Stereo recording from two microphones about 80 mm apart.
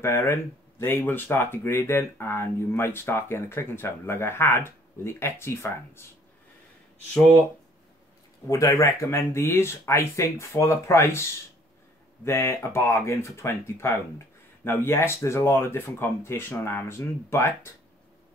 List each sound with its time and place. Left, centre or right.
0.0 s speech: left
8.5 s speech: left
12.3 s speech: left